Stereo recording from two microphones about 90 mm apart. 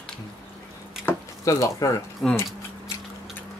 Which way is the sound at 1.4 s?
40° left (ahead or behind).